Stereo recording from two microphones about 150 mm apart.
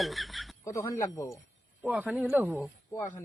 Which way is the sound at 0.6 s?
20° left (ahead or behind).